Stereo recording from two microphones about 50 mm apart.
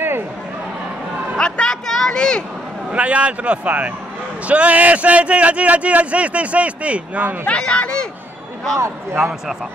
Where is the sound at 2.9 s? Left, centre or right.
Right.